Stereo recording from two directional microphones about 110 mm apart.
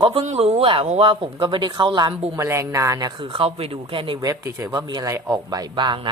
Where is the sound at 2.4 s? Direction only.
25° right (ahead or behind).